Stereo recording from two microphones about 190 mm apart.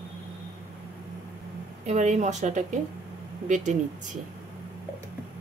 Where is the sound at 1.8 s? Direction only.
40° right (ahead or behind).